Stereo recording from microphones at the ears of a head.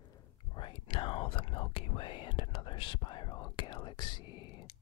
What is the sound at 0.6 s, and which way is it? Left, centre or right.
Whispering, left.